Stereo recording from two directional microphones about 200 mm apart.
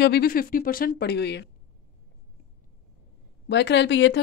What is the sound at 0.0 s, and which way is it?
A woman's voice, 50° left (ahead or behind).